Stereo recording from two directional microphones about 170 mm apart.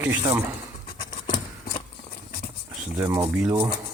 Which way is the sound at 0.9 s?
55° left (ahead or behind).